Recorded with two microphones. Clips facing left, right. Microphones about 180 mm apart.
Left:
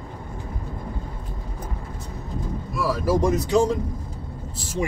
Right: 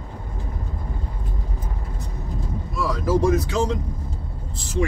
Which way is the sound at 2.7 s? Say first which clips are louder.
Even; 5° left (ahead or behind).